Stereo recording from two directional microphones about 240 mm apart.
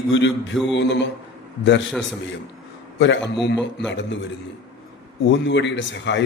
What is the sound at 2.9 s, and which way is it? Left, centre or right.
Speech, left.